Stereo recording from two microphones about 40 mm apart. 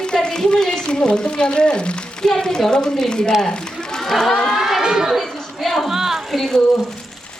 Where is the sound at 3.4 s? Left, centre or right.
Centre.